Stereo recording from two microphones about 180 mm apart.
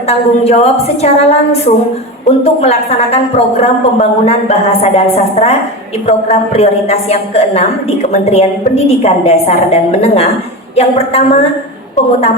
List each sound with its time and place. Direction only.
0.1 s a woman's voice: 35° left (ahead or behind)